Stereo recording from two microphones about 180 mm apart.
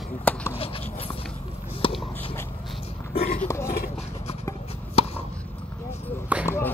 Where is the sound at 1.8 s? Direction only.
30° left (ahead or behind).